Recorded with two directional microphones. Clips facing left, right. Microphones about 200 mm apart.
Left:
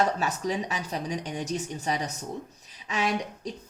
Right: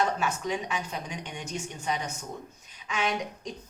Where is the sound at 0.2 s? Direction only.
35° left (ahead or behind).